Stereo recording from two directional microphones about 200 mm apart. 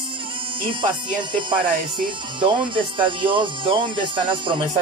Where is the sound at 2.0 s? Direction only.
25° right (ahead or behind).